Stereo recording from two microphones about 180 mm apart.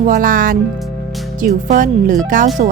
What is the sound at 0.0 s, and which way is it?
Speech, 50° right (ahead or behind).